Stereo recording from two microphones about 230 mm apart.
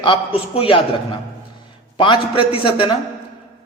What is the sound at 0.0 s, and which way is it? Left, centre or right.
Speech, left.